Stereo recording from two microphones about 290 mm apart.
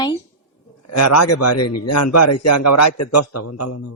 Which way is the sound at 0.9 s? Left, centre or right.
Left.